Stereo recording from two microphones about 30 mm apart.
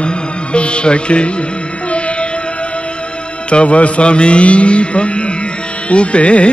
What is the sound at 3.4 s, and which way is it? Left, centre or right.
Mantra, left.